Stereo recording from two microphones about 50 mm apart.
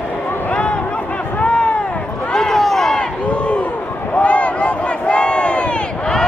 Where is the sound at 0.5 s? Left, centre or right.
Left.